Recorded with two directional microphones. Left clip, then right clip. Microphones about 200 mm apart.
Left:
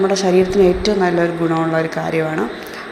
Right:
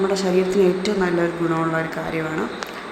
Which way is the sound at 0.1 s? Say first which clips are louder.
Left 5 dB; 15° left (ahead or behind).